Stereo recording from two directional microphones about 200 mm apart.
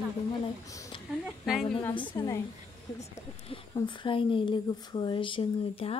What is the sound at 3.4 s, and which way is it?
Speech, 25° left (ahead or behind).